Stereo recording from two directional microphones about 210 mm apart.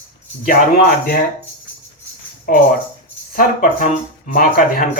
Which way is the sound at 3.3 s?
40° left (ahead or behind).